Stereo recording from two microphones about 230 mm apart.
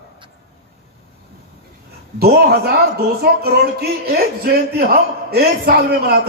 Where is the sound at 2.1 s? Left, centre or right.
Right.